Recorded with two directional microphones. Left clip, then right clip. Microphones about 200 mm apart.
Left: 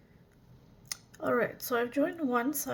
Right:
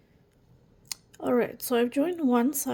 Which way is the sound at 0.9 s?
30° right (ahead or behind).